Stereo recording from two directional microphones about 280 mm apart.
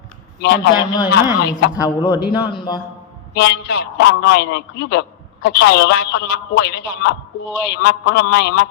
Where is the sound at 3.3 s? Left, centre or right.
Left.